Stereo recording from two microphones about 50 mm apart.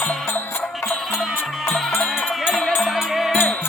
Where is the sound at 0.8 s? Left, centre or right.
Centre.